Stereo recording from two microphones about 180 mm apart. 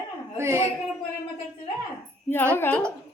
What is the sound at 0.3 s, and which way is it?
Speech, 15° right (ahead or behind).